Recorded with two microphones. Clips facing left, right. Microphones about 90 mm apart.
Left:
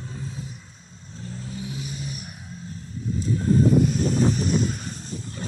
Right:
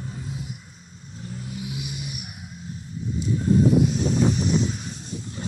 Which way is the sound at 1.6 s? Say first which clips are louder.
Even; 35° left (ahead or behind).